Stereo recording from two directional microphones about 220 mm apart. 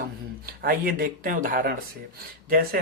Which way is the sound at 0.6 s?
40° right (ahead or behind).